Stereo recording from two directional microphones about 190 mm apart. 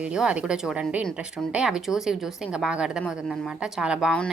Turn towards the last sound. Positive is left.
turn(degrees=0)  # may be behind; listen again after turning